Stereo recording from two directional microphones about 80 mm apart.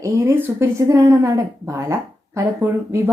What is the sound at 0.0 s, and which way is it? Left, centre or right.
A woman's voice, right.